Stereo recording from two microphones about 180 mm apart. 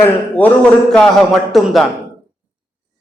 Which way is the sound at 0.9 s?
Centre (ahead or behind).